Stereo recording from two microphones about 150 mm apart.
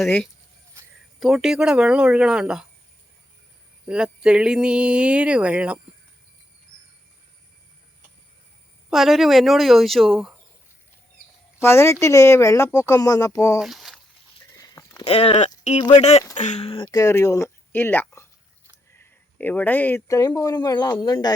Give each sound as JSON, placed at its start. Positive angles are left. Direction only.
{"t": 0.0, "sound": "speech", "side_deg": 5}
{"t": 3.8, "sound": "speech", "side_deg": -5}
{"t": 8.9, "sound": "speech", "side_deg": 0}
{"t": 11.6, "sound": "speech", "side_deg": 15}
{"t": 13.6, "sound": "a sound", "side_deg": 0}
{"t": 14.5, "sound": "a sound", "side_deg": 20}
{"t": 15.0, "sound": "speech", "side_deg": 45}
{"t": 17.0, "sound": "speech", "side_deg": 20}